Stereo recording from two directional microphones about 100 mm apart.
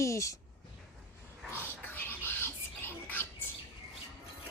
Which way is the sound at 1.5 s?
20° left (ahead or behind).